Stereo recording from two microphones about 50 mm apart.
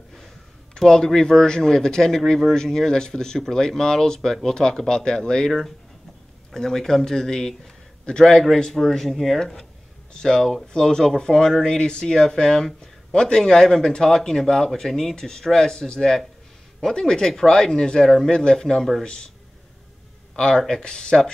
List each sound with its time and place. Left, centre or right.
0.7 s a man's voice: centre
20.3 s speech: centre